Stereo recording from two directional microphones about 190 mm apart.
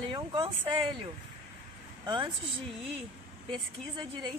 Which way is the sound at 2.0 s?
25° right (ahead or behind).